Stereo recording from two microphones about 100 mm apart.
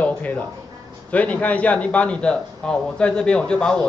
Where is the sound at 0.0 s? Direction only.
15° left (ahead or behind).